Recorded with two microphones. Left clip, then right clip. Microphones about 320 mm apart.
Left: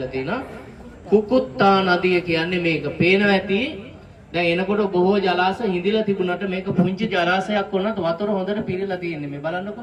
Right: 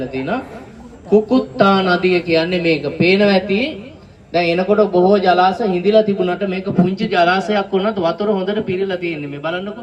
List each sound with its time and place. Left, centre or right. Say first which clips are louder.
0.0 s speech: right 4 dB; right; by 9.6 s centre